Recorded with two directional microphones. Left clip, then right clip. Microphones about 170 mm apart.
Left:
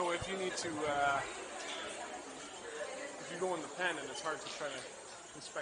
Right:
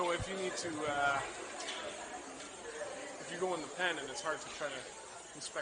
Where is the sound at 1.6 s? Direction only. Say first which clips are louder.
Right 1 dB; centre (ahead or behind).